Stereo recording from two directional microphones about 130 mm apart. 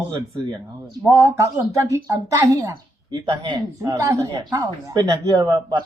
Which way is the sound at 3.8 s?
25° right (ahead or behind).